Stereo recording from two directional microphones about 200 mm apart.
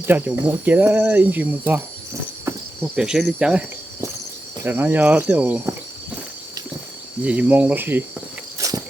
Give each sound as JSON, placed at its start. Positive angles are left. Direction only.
{"t": 0.0, "sound": "speech", "side_deg": -10}
{"t": 2.8, "sound": "cricket", "side_deg": -5}
{"t": 4.6, "sound": "speech", "side_deg": -10}
{"t": 7.2, "sound": "speech", "side_deg": -5}
{"t": 8.5, "sound": "walk", "side_deg": -15}